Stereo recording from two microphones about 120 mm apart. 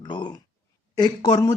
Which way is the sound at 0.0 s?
40° left (ahead or behind).